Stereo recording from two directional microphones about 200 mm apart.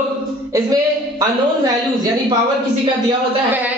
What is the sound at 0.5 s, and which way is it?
A woman's voice, 15° right (ahead or behind).